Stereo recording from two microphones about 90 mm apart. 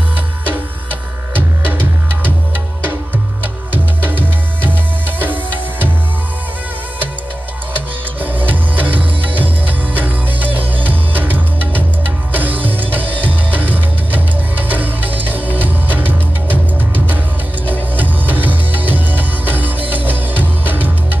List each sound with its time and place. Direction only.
5.2 s music: 20° right (ahead or behind)
8.5 s music: 20° right (ahead or behind)
17.9 s music: 20° right (ahead or behind)